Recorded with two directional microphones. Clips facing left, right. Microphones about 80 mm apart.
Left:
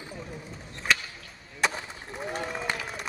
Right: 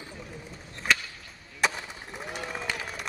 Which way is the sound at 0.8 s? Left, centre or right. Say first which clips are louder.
Even; centre.